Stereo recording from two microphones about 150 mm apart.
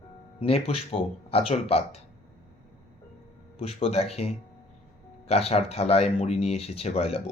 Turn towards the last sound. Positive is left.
turn(degrees=45)  # may be behind; listen again after turning